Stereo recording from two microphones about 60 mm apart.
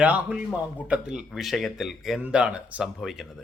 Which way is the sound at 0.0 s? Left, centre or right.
Right.